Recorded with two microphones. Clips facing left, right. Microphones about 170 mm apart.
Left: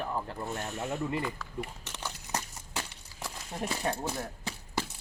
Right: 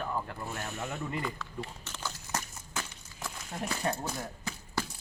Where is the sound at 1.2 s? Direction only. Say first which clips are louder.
Left 1 dB; 10° left (ahead or behind).